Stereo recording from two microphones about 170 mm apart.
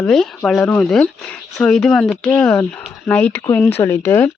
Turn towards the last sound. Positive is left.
turn(degrees=10)  # may be behind; listen again after turning